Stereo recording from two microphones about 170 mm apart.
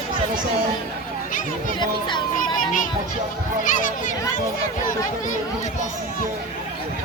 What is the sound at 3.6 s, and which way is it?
Speech, 50° left (ahead or behind).